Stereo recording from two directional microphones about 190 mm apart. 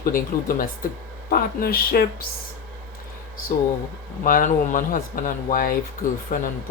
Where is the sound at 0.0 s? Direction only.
45° left (ahead or behind).